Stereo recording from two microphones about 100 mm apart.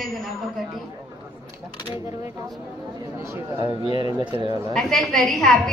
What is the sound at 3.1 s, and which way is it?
Speech, 25° right (ahead or behind).